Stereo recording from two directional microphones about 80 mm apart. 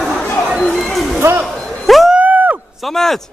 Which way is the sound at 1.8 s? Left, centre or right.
Centre.